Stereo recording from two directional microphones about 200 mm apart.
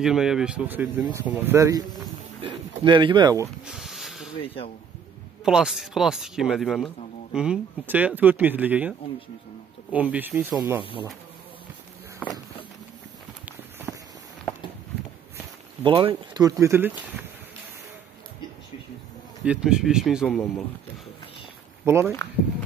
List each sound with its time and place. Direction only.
0.0 s speech: centre (ahead or behind); by 3.4 s 20° right (ahead or behind)
3.6 s a sound: centre (ahead or behind)
5.4 s speech: 5° right (ahead or behind)
9.9 s speech: 10° right (ahead or behind)
10.8 s speech: 25° left (ahead or behind)
12.2 s walk: 5° left (ahead or behind)
13.9 s walk: 5° left (ahead or behind)
15.8 s speech: 25° right (ahead or behind)
19.4 s speech: 5° right (ahead or behind)
21.8 s speech: 10° right (ahead or behind)